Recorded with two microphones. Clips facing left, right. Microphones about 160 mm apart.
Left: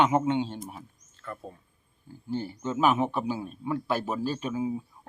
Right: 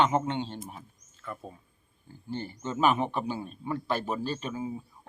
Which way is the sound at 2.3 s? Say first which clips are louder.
Left 3 dB; 5° left (ahead or behind).